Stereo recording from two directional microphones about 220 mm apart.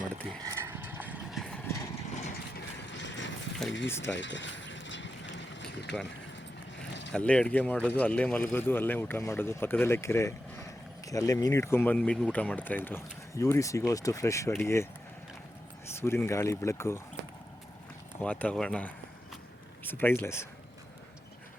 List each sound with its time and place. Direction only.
0.2 s vehicle: 10° right (ahead or behind); by 1.9 s 10° left (ahead or behind)
2.0 s vehicle: 30° left (ahead or behind)
2.8 s vehicle: 55° left (ahead or behind)
3.8 s speech: 10° left (ahead or behind)
4.1 s a sound: 55° left (ahead or behind)
7.1 s speech: 5° left (ahead or behind)
16.0 s speech: 10° left (ahead or behind)
18.2 s speech: 5° left (ahead or behind)